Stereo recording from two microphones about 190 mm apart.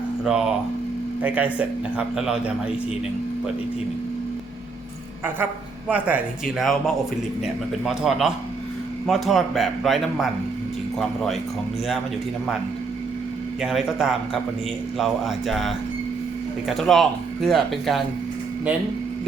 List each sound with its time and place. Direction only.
0.3 s speech: 5° right (ahead or behind)
5.9 s speech: 5° right (ahead or behind)
13.6 s speech: centre (ahead or behind)